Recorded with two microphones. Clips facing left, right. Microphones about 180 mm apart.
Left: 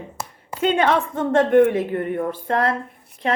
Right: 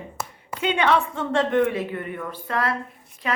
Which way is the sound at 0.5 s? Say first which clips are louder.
Left 3 dB; 45° left (ahead or behind).